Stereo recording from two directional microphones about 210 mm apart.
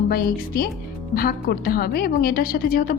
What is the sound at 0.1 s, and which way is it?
A woman's voice, 45° left (ahead or behind).